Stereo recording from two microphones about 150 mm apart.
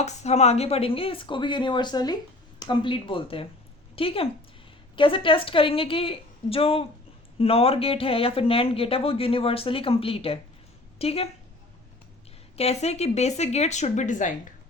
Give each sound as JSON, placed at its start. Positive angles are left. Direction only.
{"t": 0.0, "sound": "a woman's voice", "side_deg": 50}
{"t": 12.5, "sound": "speech", "side_deg": 45}